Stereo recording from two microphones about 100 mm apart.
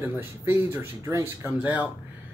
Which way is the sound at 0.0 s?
25° right (ahead or behind).